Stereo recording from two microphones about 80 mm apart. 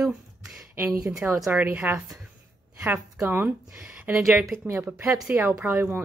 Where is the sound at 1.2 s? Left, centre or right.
Right.